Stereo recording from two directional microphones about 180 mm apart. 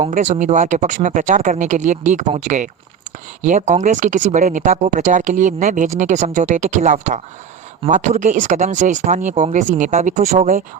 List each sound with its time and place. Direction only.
0.1 s speech: 45° right (ahead or behind)